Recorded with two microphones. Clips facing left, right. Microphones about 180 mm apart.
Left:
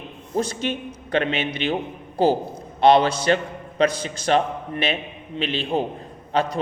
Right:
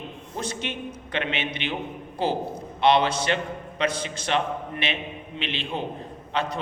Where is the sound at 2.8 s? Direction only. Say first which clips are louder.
Left 5 dB; 40° left (ahead or behind).